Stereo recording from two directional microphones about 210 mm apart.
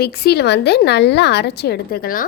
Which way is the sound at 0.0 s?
50° left (ahead or behind).